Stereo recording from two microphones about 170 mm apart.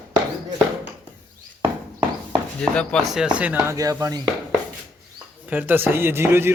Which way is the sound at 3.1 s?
5° right (ahead or behind).